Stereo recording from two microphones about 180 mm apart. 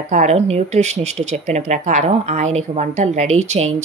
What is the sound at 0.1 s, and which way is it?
A woman's voice, 40° right (ahead or behind).